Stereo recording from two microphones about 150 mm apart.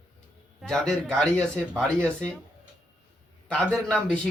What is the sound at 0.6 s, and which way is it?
A man's voice, 5° left (ahead or behind).